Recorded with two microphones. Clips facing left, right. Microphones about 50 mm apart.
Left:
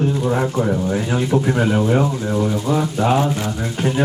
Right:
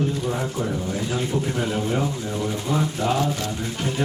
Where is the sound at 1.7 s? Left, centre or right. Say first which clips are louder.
Left 7 dB; left.